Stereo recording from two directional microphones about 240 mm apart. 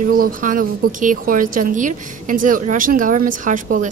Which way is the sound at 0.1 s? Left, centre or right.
Right.